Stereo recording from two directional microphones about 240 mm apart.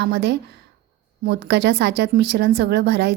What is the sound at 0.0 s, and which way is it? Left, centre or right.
A woman's voice, right.